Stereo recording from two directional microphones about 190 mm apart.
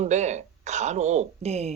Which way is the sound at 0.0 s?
35° right (ahead or behind).